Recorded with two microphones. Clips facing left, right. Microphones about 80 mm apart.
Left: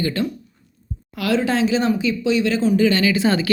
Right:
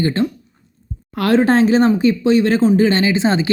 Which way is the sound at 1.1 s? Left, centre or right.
Right.